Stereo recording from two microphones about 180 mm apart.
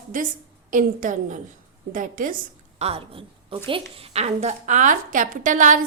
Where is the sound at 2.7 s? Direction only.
35° right (ahead or behind).